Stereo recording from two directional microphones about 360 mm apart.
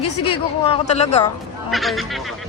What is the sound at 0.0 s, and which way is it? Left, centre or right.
Speech, left.